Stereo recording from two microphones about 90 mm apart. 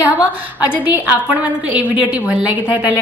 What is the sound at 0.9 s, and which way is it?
A woman's voice, 15° right (ahead or behind).